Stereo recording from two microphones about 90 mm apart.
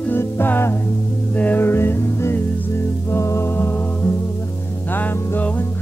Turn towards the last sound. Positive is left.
turn(degrees=30)  # may be behind; listen again after turning